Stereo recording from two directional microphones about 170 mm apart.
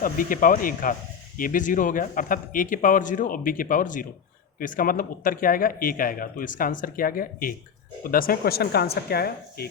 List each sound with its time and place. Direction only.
0.0 s a man's voice: 55° left (ahead or behind)